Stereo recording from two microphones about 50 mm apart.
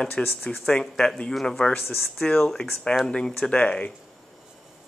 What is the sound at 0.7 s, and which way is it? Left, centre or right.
Speech, centre.